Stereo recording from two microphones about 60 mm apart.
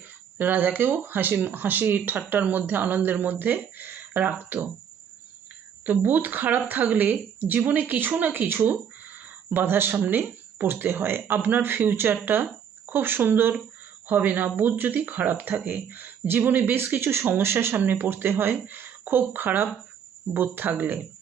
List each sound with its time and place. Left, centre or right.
0.3 s speech: right
5.8 s speech: right